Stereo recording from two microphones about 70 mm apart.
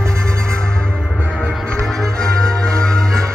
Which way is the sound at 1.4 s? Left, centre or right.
Centre.